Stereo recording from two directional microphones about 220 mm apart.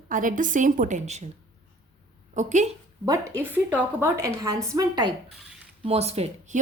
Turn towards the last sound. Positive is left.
turn(degrees=-30)  # may be behind; listen again after turning